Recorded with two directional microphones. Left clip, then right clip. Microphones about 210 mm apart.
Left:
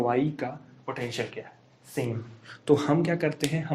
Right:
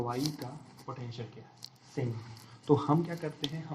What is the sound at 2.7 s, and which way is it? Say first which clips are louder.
Speech: left 5 dB; 50° left (ahead or behind).